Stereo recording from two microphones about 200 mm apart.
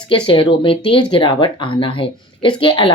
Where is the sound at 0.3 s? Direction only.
25° left (ahead or behind).